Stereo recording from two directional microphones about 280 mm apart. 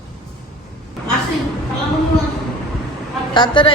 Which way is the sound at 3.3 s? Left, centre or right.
Centre.